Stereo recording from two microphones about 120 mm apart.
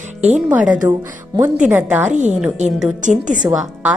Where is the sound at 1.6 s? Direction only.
15° right (ahead or behind).